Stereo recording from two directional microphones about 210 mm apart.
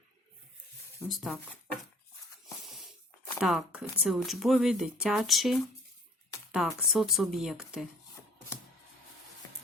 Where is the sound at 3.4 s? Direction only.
5° right (ahead or behind).